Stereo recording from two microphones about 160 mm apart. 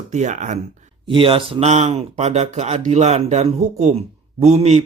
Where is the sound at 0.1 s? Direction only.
50° right (ahead or behind).